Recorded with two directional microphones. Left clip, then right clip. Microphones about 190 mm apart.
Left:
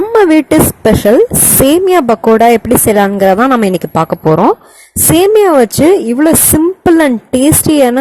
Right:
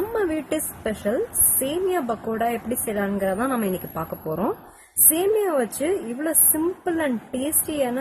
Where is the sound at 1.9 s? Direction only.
45° left (ahead or behind).